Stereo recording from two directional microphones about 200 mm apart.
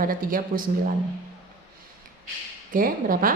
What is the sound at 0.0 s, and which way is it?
Speech, 45° right (ahead or behind).